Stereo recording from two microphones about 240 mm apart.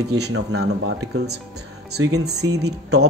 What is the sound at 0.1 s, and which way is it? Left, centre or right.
Speech, right.